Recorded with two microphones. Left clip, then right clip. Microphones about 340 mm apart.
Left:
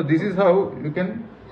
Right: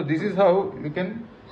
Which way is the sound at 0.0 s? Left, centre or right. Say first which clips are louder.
Left 1 dB; right.